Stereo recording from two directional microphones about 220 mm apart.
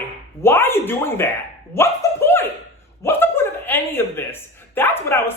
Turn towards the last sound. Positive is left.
turn(degrees=10)  # may be behind; listen again after turning